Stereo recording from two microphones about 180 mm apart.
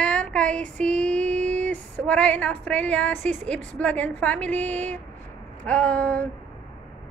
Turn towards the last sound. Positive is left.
turn(degrees=5)  # may be behind; listen again after turning